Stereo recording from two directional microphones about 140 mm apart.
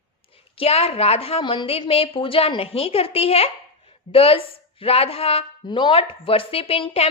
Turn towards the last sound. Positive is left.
turn(degrees=40)  # may be behind; listen again after turning